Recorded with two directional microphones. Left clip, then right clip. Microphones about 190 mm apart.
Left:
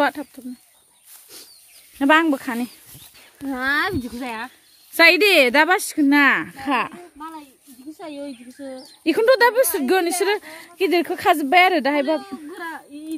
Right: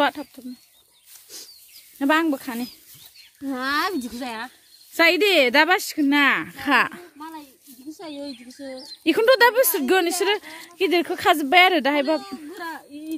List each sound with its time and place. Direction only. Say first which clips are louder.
0.0 s speech: left 1 dB; 5° left (ahead or behind)
2.0 s speech: left 4 dB; 15° left (ahead or behind)
3.6 s speech: left 3 dB; 35° right (ahead or behind)
4.2 s a woman's voice: left 2 dB; centre (ahead or behind)